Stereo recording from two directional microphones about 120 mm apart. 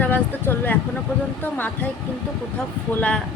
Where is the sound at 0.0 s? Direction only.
15° left (ahead or behind).